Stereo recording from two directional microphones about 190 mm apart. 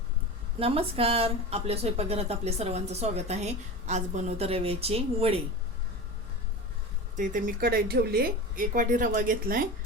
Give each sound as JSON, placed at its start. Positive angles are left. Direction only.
{"t": 0.6, "sound": "speech", "side_deg": -30}
{"t": 7.2, "sound": "speech", "side_deg": -45}